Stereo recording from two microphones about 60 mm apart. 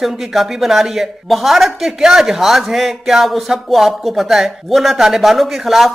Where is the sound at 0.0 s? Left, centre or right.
Centre.